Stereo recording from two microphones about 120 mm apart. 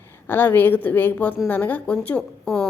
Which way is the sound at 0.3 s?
15° left (ahead or behind).